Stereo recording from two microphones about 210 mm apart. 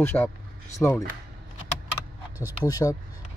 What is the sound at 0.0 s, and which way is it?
Speech, 10° left (ahead or behind).